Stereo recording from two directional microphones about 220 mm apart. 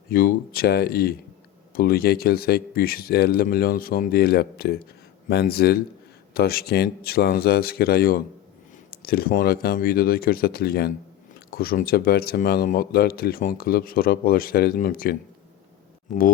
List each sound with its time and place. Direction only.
0.1 s speech: 45° left (ahead or behind)